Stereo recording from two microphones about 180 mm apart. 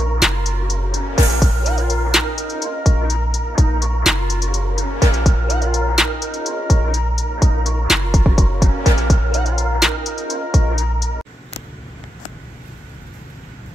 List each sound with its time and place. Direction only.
0.2 s music: centre (ahead or behind)